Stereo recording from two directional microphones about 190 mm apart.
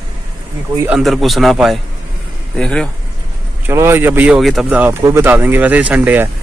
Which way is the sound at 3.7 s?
15° right (ahead or behind).